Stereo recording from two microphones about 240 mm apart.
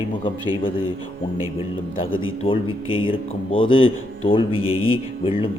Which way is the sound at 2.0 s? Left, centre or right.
Left.